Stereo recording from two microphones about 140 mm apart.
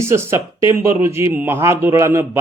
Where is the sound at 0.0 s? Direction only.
20° right (ahead or behind).